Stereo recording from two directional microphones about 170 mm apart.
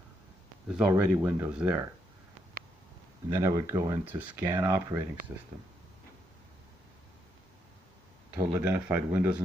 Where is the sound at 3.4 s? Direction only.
20° right (ahead or behind).